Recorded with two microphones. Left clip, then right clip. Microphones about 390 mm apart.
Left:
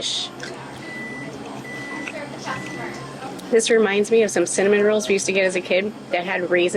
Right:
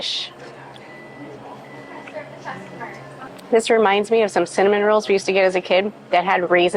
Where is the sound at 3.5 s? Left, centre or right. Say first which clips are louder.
Right 2 dB; right.